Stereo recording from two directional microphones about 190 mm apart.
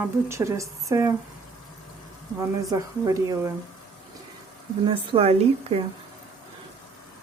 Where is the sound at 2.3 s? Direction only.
20° right (ahead or behind).